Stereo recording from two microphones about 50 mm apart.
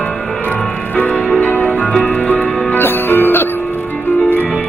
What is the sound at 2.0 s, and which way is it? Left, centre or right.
Music, left.